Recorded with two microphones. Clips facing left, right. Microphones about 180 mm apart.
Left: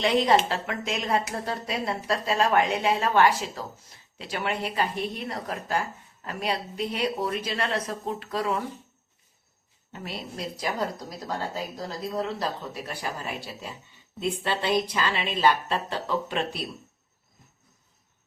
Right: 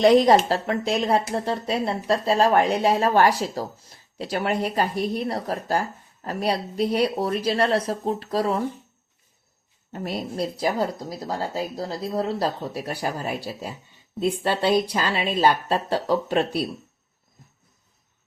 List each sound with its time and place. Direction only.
0.0 s speech: 40° right (ahead or behind)
9.9 s speech: 40° right (ahead or behind)